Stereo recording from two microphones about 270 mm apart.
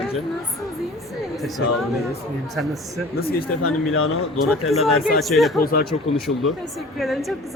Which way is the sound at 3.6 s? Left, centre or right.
Left.